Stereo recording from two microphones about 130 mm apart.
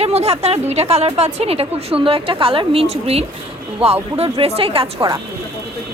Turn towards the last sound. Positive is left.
turn(degrees=-45)  # may be behind; listen again after turning